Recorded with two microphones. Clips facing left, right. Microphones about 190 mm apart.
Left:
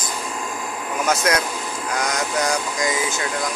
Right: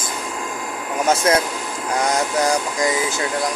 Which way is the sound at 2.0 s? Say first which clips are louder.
Right 4 dB; 30° right (ahead or behind).